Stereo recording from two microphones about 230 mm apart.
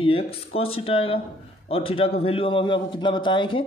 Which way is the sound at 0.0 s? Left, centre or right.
Left.